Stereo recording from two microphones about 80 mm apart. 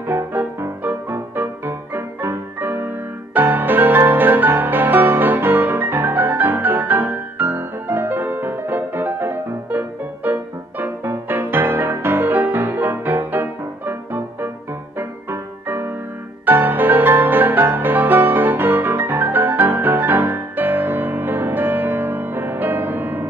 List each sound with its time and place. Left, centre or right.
0.0 s music: right